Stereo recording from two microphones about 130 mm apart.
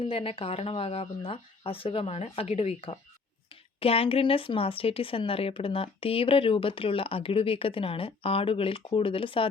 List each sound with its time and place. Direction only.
0.0 s speech: 45° left (ahead or behind)